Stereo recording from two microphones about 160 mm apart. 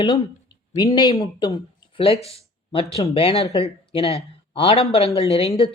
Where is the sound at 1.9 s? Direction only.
35° left (ahead or behind).